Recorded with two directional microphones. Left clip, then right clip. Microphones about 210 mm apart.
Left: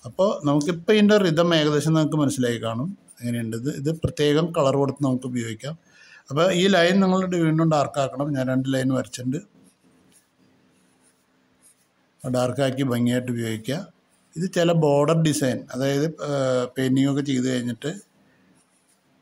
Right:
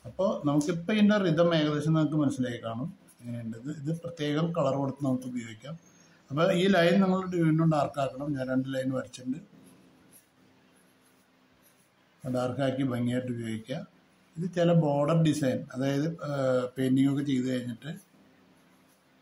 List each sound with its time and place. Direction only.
0.1 s speech: 45° left (ahead or behind)
12.3 s speech: 50° left (ahead or behind)